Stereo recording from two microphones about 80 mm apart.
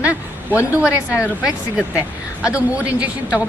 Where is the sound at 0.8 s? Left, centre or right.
Centre.